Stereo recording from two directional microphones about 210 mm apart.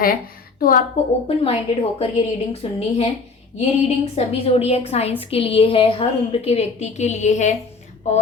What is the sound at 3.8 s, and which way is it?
A woman's voice, 30° left (ahead or behind).